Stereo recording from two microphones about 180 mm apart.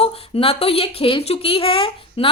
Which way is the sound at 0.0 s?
35° left (ahead or behind).